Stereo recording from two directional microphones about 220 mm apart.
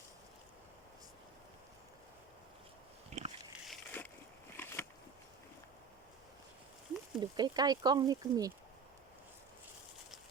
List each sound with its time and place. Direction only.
3.1 s pig: 30° right (ahead or behind)
3.7 s a sound: 5° left (ahead or behind)
7.2 s speech: 20° right (ahead or behind)